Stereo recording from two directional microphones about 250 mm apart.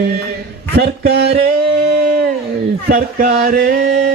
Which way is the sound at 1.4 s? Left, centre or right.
Right.